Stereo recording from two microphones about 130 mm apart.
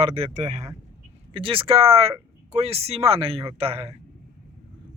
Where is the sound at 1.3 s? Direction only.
40° right (ahead or behind).